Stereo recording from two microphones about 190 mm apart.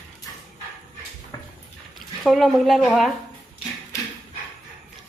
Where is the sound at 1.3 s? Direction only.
20° left (ahead or behind).